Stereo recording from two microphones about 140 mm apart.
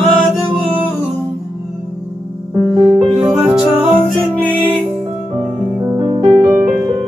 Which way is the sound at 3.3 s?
5° right (ahead or behind).